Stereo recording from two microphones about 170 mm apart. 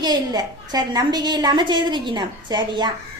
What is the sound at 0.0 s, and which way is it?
A woman's voice, 25° right (ahead or behind).